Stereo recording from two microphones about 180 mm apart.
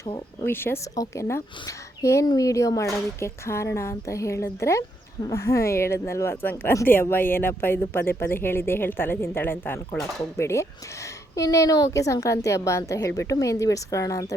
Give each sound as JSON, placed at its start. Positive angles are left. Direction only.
{"t": 0.4, "sound": "speech", "side_deg": 15}